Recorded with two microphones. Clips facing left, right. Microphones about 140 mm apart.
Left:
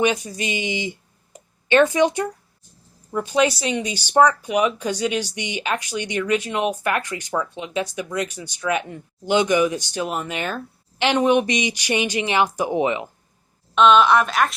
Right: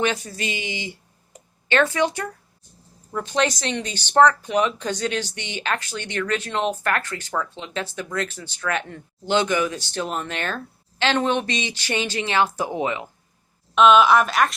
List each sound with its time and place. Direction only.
0.0 s speech: 15° left (ahead or behind)
13.7 s speech: centre (ahead or behind)